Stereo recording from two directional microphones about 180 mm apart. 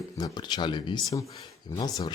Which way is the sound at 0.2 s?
25° left (ahead or behind).